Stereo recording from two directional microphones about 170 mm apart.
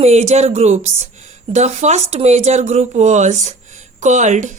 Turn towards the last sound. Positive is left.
turn(degrees=-45)  # may be behind; listen again after turning